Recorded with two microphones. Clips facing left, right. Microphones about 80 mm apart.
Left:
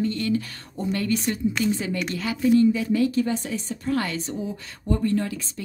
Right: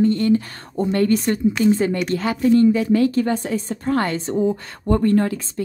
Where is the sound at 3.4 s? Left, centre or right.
Right.